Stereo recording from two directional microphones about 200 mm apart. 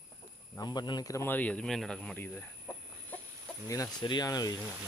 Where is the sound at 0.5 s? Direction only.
20° left (ahead or behind).